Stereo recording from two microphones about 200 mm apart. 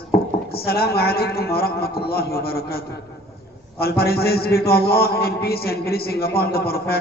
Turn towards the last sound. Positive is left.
turn(degrees=50)  # may be behind; listen again after turning